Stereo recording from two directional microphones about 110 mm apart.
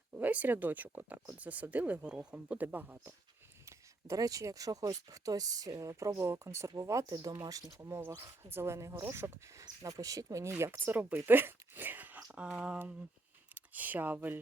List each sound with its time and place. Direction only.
0.2 s speech: 15° right (ahead or behind)
3.7 s speech: 25° right (ahead or behind)